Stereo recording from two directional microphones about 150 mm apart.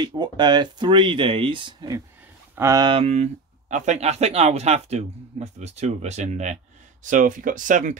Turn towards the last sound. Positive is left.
turn(degrees=-55)  # may be behind; listen again after turning